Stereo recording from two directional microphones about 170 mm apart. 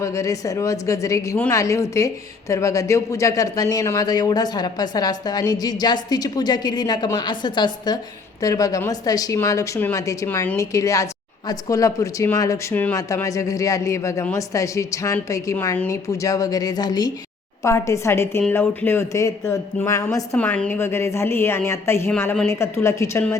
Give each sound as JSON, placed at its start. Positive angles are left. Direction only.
{"t": 0.0, "sound": "speech", "side_deg": 20}